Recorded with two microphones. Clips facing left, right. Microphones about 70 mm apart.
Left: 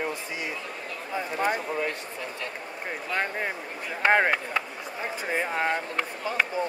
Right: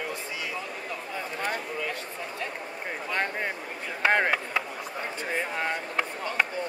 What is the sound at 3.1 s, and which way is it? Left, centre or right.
Speech, centre.